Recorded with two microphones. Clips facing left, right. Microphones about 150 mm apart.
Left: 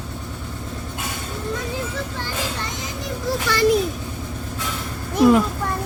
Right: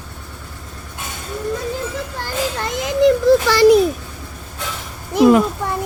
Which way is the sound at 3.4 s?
90° right.